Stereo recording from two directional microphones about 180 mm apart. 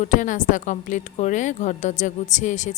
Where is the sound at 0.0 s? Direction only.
45° left (ahead or behind).